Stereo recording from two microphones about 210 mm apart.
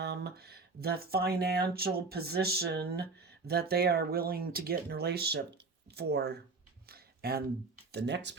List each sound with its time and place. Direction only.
0.0 s speech: 50° right (ahead or behind)
6.8 s a sound: 45° right (ahead or behind)
7.9 s speech: 55° right (ahead or behind)